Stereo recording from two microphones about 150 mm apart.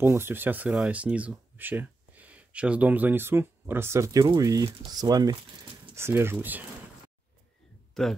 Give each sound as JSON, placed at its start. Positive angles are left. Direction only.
{"t": 0.0, "sound": "speech", "side_deg": -15}
{"t": 5.9, "sound": "speech", "side_deg": -15}
{"t": 7.9, "sound": "speech", "side_deg": 0}